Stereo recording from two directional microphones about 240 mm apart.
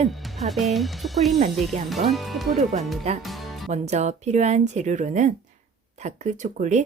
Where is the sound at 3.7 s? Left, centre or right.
Right.